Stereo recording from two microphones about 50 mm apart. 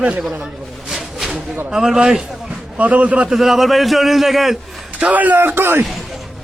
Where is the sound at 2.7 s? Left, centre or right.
Right.